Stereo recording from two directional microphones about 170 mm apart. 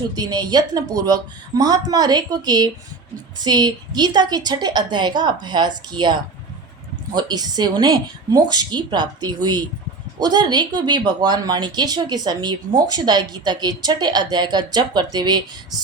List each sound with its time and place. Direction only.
0.2 s speech: 25° right (ahead or behind)
7.2 s speech: 25° right (ahead or behind)